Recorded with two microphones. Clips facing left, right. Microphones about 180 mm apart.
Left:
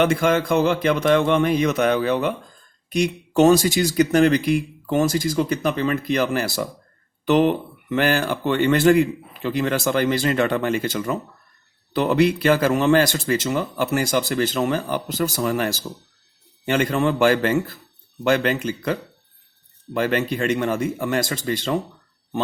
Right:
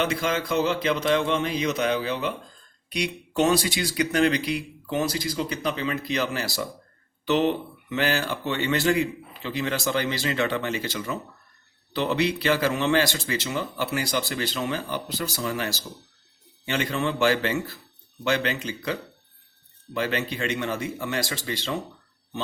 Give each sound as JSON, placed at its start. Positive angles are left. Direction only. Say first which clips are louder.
{"t": 0.0, "sound": "speech", "louder": "left 7 dB", "side_deg": 50}